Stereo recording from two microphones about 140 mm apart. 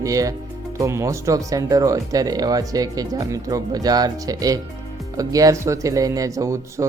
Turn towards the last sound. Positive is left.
turn(degrees=-25)  # may be behind; listen again after turning